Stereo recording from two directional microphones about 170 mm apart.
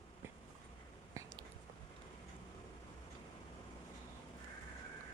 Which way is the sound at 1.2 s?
20° right (ahead or behind).